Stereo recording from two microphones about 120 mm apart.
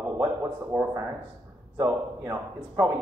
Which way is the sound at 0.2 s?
20° right (ahead or behind).